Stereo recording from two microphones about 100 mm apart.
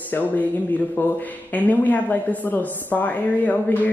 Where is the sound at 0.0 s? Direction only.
15° left (ahead or behind).